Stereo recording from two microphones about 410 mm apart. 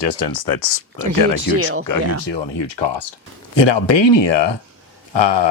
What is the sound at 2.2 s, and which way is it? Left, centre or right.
Speech, left.